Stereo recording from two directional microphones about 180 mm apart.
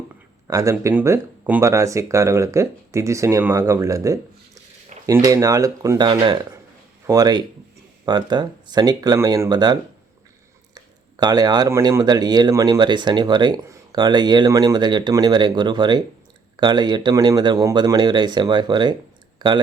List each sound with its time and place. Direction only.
0.4 s speech: 15° right (ahead or behind)
11.2 s speech: 20° right (ahead or behind)